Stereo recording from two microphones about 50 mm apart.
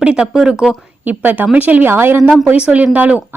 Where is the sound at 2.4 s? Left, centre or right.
Right.